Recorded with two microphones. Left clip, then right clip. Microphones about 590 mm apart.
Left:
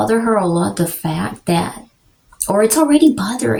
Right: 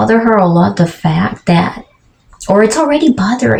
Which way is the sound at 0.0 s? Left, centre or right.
Left.